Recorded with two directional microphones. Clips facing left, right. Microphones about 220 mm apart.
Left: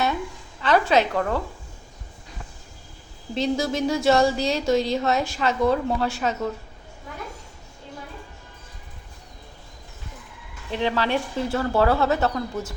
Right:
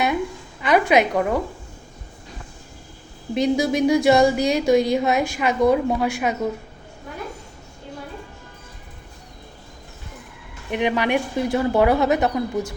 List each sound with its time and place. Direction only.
0.6 s speech: 15° right (ahead or behind)
3.3 s speech: 15° right (ahead or behind)
10.7 s speech: 15° right (ahead or behind)